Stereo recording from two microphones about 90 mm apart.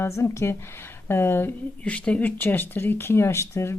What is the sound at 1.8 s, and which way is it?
Speech, 15° left (ahead or behind).